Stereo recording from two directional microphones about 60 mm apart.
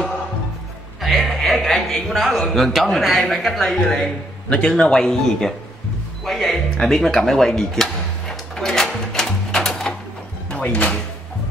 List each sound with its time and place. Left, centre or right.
1.2 s a man's voice: centre
6.2 s music: centre
10.5 s speech: left